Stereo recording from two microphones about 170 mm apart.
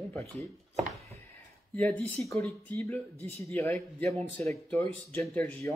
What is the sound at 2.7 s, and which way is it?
Speech, 15° left (ahead or behind).